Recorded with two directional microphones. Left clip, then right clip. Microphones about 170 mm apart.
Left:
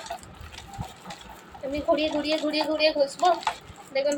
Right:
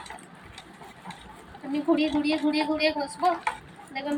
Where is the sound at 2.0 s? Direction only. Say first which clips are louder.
Even; 25° left (ahead or behind).